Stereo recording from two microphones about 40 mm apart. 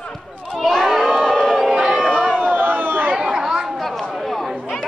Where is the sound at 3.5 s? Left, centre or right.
Centre.